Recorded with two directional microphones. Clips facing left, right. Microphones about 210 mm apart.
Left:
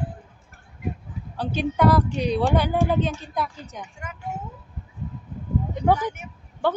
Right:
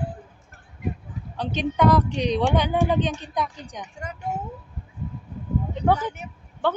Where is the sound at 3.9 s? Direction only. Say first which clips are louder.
Right 3 dB; 40° right (ahead or behind).